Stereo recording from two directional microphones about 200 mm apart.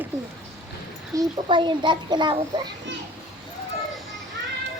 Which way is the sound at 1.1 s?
25° right (ahead or behind).